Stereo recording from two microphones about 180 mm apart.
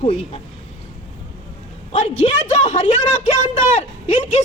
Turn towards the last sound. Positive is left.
turn(degrees=40)  # may be behind; listen again after turning